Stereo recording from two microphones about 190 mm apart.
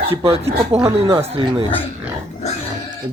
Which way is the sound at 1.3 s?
30° right (ahead or behind).